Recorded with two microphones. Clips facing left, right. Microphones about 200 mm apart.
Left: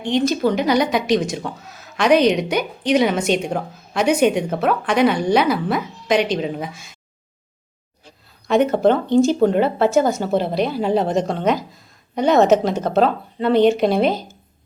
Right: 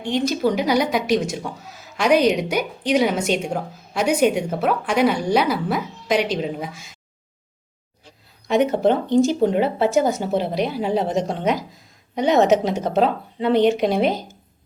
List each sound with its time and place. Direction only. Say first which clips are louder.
0.0 s a woman's voice: left 2 dB; 10° right (ahead or behind)
8.4 s a woman's voice: left 2 dB; 15° right (ahead or behind)